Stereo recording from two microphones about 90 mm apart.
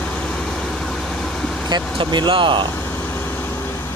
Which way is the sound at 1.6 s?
55° right (ahead or behind).